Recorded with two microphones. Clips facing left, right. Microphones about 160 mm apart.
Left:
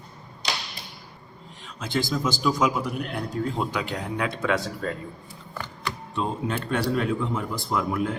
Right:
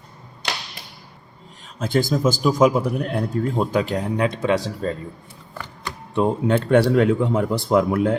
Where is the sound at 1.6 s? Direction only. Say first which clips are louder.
Right 7 dB; 50° right (ahead or behind).